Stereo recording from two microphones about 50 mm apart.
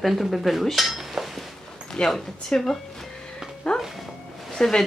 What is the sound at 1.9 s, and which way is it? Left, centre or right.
Speech, centre.